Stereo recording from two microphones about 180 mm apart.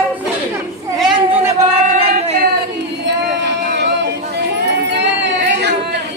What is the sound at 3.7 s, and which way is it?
Chatter, 70° right (ahead or behind).